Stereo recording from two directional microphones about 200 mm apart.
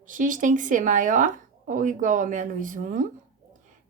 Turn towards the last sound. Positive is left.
turn(degrees=-40)  # may be behind; listen again after turning